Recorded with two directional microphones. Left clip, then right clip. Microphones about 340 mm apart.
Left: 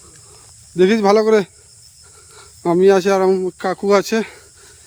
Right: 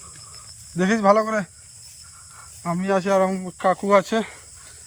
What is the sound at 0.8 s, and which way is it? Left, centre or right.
Speech, centre.